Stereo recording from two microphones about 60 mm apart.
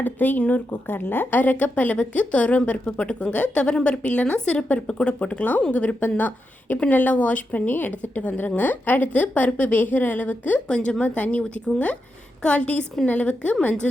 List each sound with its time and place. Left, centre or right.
0.0 s a woman's voice: left
10.7 s a woman's voice: centre